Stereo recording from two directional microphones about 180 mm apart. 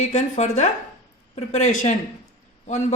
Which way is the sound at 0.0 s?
40° left (ahead or behind).